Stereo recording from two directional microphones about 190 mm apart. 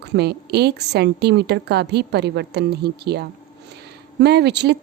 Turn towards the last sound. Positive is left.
turn(degrees=-60)  # may be behind; listen again after turning